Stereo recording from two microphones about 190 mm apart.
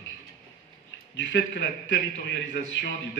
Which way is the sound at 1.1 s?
65° left (ahead or behind).